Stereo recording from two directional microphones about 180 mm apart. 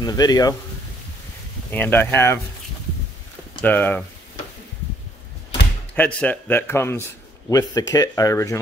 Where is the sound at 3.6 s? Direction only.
10° left (ahead or behind).